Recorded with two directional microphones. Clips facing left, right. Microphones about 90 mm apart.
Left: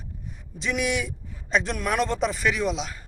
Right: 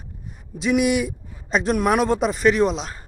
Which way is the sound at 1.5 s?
45° right (ahead or behind).